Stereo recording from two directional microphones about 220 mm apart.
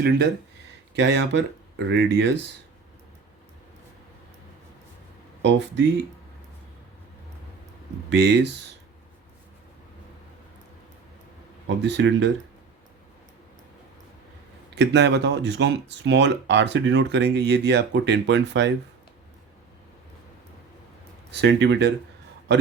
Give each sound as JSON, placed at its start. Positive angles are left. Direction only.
{"t": 0.9, "sound": "speech", "side_deg": -50}
{"t": 5.4, "sound": "speech", "side_deg": -55}
{"t": 8.1, "sound": "speech", "side_deg": -50}
{"t": 11.8, "sound": "speech", "side_deg": -55}
{"t": 14.8, "sound": "speech", "side_deg": -50}
{"t": 21.3, "sound": "speech", "side_deg": -50}